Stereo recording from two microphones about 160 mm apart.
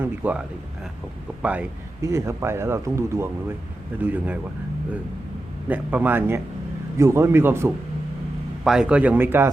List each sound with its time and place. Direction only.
0.0 s speech: 10° right (ahead or behind)
5.6 s speech: 10° right (ahead or behind)
8.6 s speech: 5° right (ahead or behind)